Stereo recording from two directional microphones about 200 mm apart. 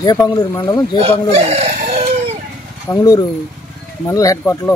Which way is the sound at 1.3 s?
30° right (ahead or behind).